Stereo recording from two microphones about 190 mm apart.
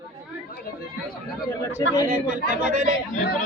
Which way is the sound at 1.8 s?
15° left (ahead or behind).